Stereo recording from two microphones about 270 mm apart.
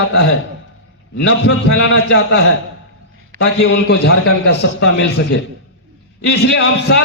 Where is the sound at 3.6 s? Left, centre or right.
Left.